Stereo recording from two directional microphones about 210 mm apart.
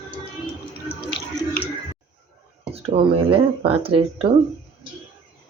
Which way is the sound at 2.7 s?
25° right (ahead or behind).